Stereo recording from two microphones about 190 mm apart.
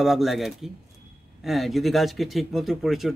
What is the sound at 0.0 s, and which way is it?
A man's voice, centre (ahead or behind).